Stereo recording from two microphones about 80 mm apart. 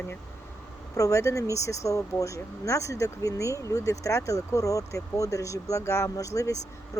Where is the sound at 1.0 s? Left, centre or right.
Left.